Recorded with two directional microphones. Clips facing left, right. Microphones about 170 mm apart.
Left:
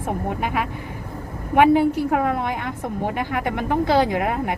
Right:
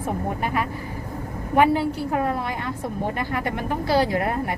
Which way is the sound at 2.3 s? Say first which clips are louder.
Left 2 dB; 20° left (ahead or behind).